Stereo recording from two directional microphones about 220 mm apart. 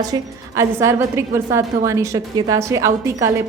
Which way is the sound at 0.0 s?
15° right (ahead or behind).